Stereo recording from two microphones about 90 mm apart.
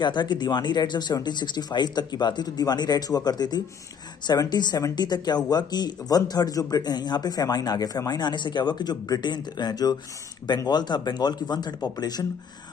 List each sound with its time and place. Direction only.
0.0 s speech: 60° left (ahead or behind)